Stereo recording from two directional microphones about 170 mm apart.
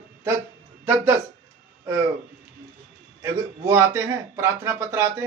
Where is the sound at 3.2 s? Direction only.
15° right (ahead or behind).